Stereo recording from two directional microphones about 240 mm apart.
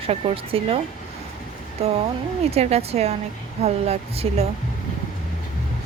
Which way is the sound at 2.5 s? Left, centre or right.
Right.